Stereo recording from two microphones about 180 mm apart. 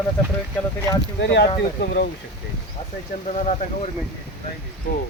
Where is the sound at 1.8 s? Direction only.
60° left (ahead or behind).